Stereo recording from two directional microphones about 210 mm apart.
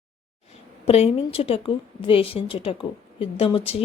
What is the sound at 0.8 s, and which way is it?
A woman's voice, 30° left (ahead or behind).